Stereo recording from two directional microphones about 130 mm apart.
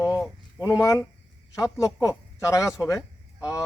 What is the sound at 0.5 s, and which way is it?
A man's voice, 25° left (ahead or behind).